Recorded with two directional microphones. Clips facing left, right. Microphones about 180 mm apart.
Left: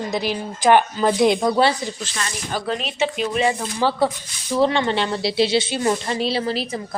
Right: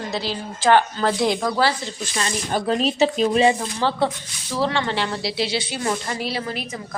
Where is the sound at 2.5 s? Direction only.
40° right (ahead or behind).